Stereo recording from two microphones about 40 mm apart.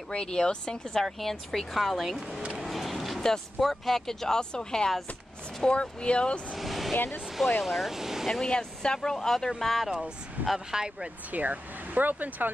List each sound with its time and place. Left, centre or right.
0.1 s speech: centre
1.0 s speech: centre
2.5 s vehicle: centre
3.2 s speech: centre; by 6.4 s left
6.5 s speech: centre
8.5 s speech: centre
9.6 s speech: centre
9.8 s speech: centre
10.4 s speech: right
10.7 s speech: centre
11.3 s speech: right